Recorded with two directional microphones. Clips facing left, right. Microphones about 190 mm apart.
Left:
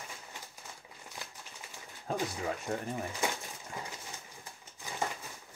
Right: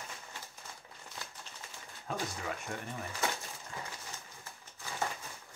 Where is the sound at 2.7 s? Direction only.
35° left (ahead or behind).